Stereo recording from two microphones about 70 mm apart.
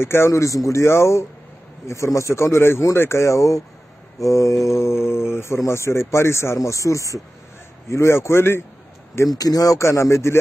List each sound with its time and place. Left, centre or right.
0.0 s speech: left
9.4 s speech: left
9.8 s speech: left